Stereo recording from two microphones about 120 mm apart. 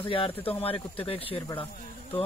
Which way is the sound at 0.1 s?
50° left (ahead or behind).